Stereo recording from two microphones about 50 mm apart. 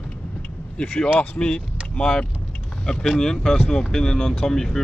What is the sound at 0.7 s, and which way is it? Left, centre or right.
Speech, centre.